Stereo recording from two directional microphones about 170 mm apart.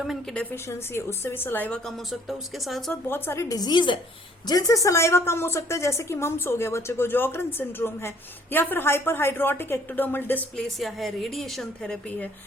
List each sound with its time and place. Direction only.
0.5 s a woman's voice: 15° left (ahead or behind)
3.1 s a woman's voice: 15° left (ahead or behind)